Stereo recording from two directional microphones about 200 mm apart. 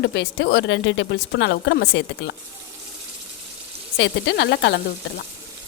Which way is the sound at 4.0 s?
60° left (ahead or behind).